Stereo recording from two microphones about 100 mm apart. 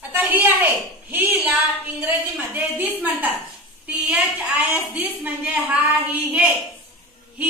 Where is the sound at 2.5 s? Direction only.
15° right (ahead or behind).